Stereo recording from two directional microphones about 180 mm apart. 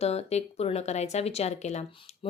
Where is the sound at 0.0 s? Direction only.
35° left (ahead or behind).